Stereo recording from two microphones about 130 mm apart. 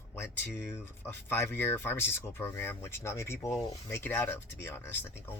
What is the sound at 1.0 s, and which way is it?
Speech, 20° left (ahead or behind).